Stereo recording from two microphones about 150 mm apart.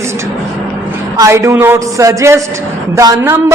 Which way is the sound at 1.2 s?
20° right (ahead or behind).